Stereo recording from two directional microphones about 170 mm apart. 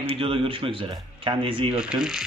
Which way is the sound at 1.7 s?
5° right (ahead or behind).